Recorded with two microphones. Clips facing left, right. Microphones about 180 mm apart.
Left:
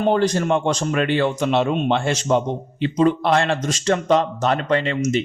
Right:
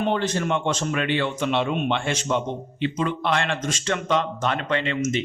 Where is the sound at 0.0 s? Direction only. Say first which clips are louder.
Left 5 dB; 40° left (ahead or behind).